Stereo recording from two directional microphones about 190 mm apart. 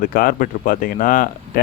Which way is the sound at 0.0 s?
50° left (ahead or behind).